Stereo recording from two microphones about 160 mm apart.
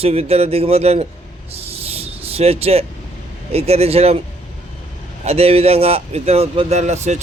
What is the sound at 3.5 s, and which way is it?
Speech, 40° right (ahead or behind).